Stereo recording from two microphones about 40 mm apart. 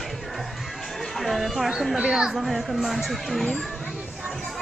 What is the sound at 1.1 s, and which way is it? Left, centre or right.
Speech, centre.